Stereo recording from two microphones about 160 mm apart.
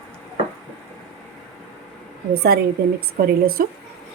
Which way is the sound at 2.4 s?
70° right (ahead or behind).